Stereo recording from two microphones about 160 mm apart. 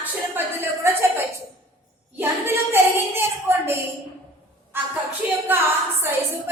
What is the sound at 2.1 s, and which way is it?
A woman's voice, 15° right (ahead or behind).